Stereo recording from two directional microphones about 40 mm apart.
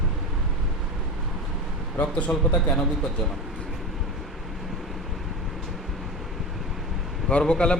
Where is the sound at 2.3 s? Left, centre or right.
Left.